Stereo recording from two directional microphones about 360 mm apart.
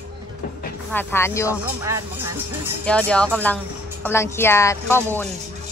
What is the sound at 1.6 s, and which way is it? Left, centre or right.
Speech, centre.